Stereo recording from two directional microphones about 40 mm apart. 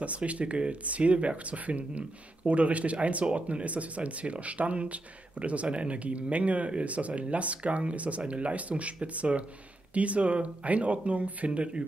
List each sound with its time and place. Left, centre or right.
0.0 s speech: right